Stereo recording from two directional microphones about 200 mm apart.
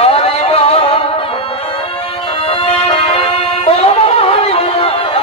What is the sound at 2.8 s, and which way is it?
Music, 30° left (ahead or behind).